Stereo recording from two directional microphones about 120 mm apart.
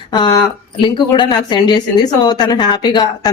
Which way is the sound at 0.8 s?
40° left (ahead or behind).